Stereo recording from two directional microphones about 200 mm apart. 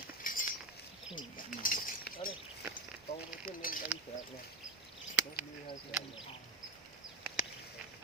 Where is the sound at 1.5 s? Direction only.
45° left (ahead or behind).